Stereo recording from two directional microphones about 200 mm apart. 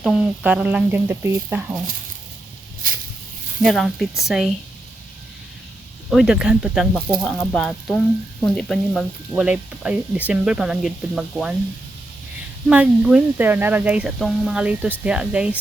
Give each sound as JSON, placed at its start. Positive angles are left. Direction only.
{"t": 0.0, "sound": "speech", "side_deg": 0}
{"t": 2.8, "sound": "a sound", "side_deg": -45}
{"t": 3.6, "sound": "speech", "side_deg": 0}
{"t": 6.1, "sound": "speech", "side_deg": 0}
{"t": 12.6, "sound": "speech", "side_deg": -5}